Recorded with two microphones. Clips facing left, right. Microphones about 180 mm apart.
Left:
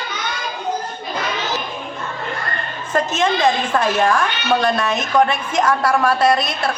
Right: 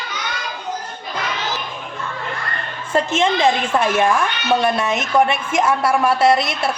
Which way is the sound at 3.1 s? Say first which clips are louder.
Right 1 dB; 25° right (ahead or behind).